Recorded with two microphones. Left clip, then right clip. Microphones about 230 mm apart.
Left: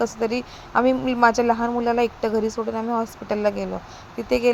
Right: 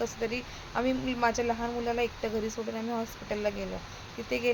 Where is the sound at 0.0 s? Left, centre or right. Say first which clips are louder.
Left 9 dB; left.